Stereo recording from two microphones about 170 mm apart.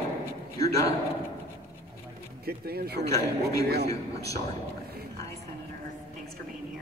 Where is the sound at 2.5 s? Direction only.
65° right (ahead or behind).